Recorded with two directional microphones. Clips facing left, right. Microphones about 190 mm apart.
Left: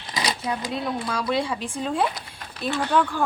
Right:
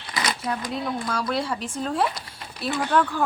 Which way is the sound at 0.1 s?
15° left (ahead or behind).